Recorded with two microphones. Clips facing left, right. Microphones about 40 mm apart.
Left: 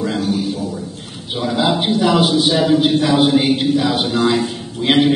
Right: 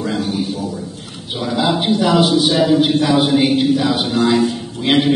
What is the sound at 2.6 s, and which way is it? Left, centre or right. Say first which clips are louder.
A man's voice: even; centre.